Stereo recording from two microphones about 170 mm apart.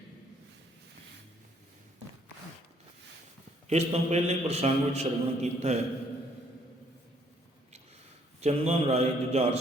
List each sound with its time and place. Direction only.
3.7 s a man's voice: 40° right (ahead or behind)
8.4 s a man's voice: 40° right (ahead or behind)